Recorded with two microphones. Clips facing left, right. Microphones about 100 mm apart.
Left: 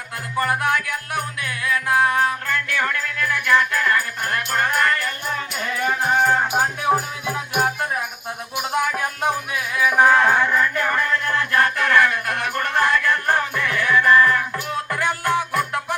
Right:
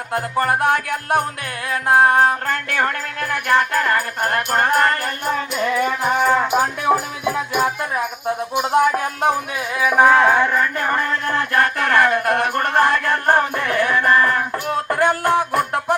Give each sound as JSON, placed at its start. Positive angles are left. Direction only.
{"t": 0.1, "sound": "music", "side_deg": -40}
{"t": 5.2, "sound": "music", "side_deg": -80}
{"t": 5.8, "sound": "music", "side_deg": -55}
{"t": 6.3, "sound": "music", "side_deg": -90}
{"t": 6.8, "sound": "music", "side_deg": -45}
{"t": 8.5, "sound": "music", "side_deg": -35}
{"t": 9.8, "sound": "music", "side_deg": -15}
{"t": 10.8, "sound": "music", "side_deg": -30}